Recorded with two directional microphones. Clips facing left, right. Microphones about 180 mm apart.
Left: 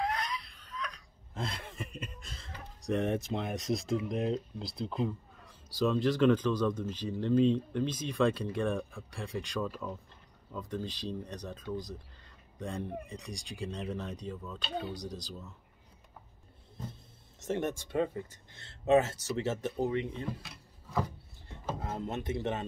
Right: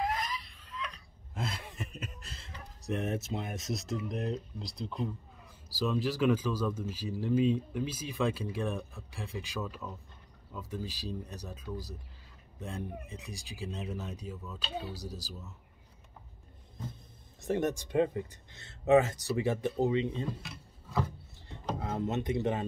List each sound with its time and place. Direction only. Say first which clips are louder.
0.0 s a sound: even; centre (ahead or behind)
1.3 s speech: even; 5° right (ahead or behind)
17.4 s speech: right 2 dB; 15° right (ahead or behind)
22.0 s speech: right 4 dB; 20° right (ahead or behind)